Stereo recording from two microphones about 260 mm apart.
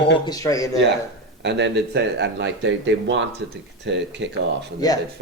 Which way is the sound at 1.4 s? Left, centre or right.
Right.